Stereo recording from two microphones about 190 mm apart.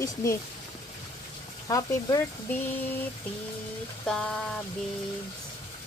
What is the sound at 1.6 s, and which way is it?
Speech, 15° left (ahead or behind).